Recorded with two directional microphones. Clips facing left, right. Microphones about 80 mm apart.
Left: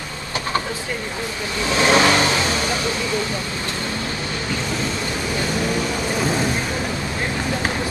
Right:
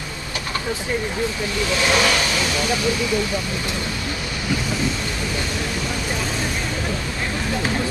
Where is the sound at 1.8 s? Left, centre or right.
Left.